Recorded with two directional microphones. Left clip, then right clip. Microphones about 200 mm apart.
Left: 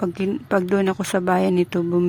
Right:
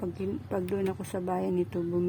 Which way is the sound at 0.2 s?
15° left (ahead or behind).